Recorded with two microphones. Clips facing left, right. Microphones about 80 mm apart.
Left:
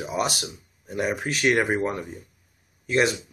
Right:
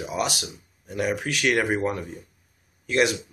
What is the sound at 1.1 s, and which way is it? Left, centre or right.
Speech, left.